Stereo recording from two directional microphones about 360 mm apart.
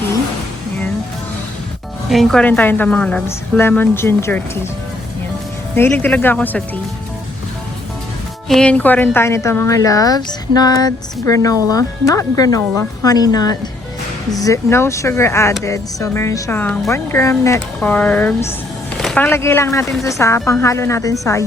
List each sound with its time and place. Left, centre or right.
2.0 s a woman's voice: centre
5.7 s a woman's voice: centre
8.4 s speech: centre